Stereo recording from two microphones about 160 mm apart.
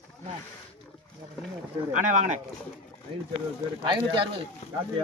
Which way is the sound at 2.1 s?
50° right (ahead or behind).